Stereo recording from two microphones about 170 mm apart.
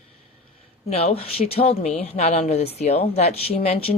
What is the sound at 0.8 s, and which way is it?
Speech, 35° left (ahead or behind).